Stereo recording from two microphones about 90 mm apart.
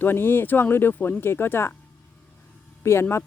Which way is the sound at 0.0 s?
25° left (ahead or behind).